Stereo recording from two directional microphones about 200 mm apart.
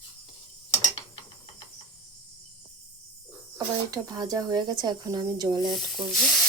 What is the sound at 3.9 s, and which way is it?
Speech, 20° right (ahead or behind).